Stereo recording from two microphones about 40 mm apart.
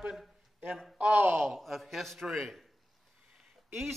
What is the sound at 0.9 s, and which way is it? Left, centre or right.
Speech, right.